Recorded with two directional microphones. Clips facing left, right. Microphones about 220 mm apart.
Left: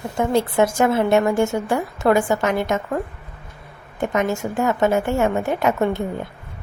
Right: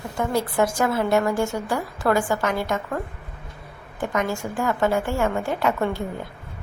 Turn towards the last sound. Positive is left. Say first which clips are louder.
# left 4 dB
turn(degrees=20)  # may be behind; listen again after turning